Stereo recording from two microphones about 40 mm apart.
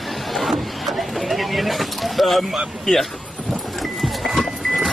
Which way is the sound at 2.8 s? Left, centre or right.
Centre.